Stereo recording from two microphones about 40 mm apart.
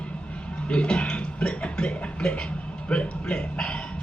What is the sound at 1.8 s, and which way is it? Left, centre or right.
Speech, left.